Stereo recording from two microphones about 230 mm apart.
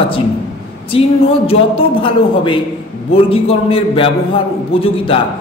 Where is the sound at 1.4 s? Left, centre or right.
Left.